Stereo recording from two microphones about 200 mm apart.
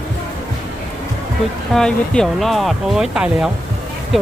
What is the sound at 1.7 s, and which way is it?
Speech, 5° left (ahead or behind).